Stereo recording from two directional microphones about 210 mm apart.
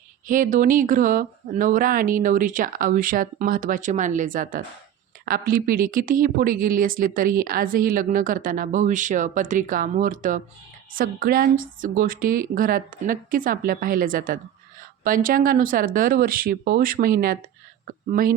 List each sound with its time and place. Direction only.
0.3 s speech: 40° right (ahead or behind)